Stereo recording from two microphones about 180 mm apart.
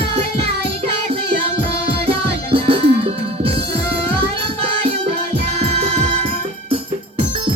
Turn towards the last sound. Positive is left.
turn(degrees=-35)  # may be behind; listen again after turning